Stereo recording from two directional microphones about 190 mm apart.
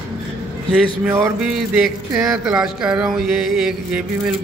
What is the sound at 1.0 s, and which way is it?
Mantra, 10° right (ahead or behind).